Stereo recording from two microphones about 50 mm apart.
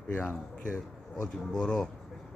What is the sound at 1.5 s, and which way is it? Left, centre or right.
Speech, centre.